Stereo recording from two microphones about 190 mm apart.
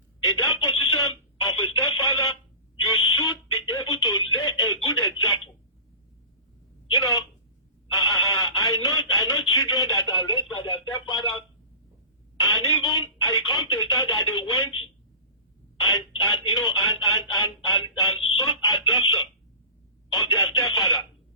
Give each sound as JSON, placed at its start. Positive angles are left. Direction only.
{"t": 0.3, "sound": "telephone", "side_deg": 25}
{"t": 3.7, "sound": "telephone", "side_deg": 25}
{"t": 4.4, "sound": "a sound", "side_deg": 25}
{"t": 6.9, "sound": "telephone", "side_deg": 20}
{"t": 16.6, "sound": "a sound", "side_deg": 20}
{"t": 18.6, "sound": "chicken", "side_deg": 25}
{"t": 20.1, "sound": "telephone", "side_deg": 25}